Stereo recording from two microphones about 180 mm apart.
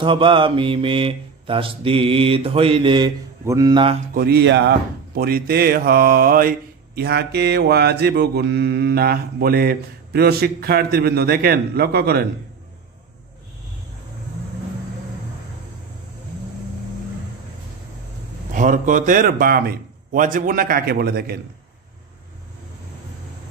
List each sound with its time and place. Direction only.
0.0 s mantra: 30° right (ahead or behind)
4.1 s mantra: 60° right (ahead or behind)
7.0 s mantra: 65° right (ahead or behind)
18.5 s a man's voice: 45° right (ahead or behind)